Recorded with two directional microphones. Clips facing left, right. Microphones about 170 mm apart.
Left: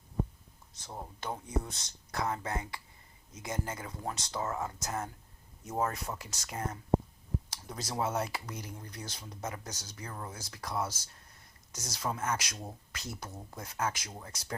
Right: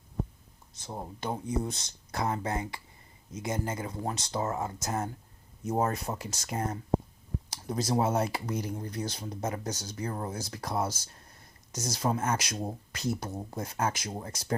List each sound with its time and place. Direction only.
0.9 s speech: 20° right (ahead or behind)